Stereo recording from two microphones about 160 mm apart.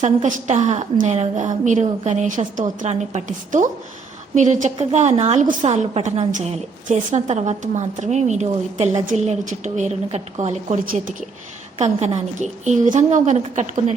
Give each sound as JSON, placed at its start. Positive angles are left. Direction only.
{"t": 0.0, "sound": "a woman's voice", "side_deg": -45}